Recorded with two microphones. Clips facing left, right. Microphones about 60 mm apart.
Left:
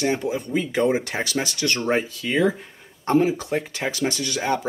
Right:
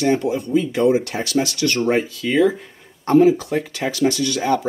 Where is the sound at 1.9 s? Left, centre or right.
Centre.